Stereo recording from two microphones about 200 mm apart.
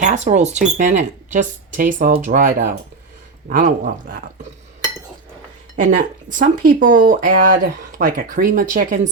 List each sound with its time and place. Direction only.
0.0 s speech: 35° right (ahead or behind)
5.7 s speech: 40° right (ahead or behind)